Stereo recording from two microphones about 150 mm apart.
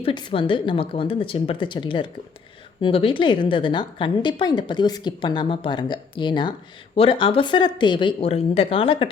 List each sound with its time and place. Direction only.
0.0 s a woman's voice: 30° left (ahead or behind)